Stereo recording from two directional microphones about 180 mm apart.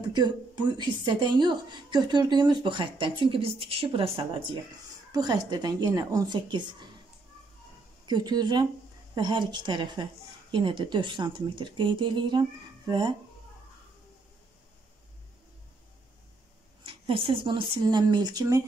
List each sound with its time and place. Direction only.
0.0 s speech: 25° right (ahead or behind)
8.1 s speech: 20° right (ahead or behind)
16.8 s speech: 30° right (ahead or behind)